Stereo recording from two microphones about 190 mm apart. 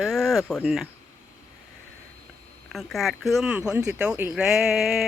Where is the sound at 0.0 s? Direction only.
Centre (ahead or behind).